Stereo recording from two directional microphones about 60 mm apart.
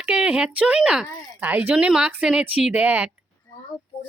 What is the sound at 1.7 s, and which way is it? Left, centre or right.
Speech, centre.